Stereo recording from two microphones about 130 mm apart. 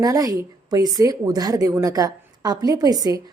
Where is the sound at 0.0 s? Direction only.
25° right (ahead or behind).